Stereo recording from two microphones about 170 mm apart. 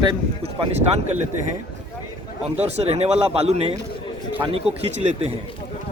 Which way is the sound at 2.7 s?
40° right (ahead or behind).